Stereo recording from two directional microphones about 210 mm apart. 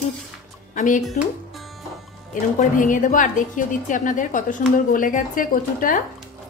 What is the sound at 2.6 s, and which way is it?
A woman's voice, 40° left (ahead or behind).